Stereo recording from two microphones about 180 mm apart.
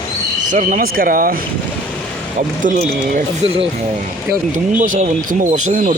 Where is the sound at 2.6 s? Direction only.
45° right (ahead or behind).